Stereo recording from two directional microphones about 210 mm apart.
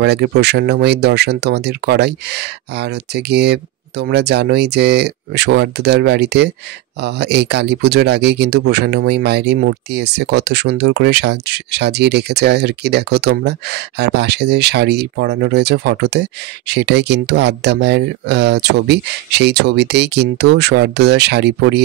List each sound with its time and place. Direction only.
0.0 s speech: 55° right (ahead or behind)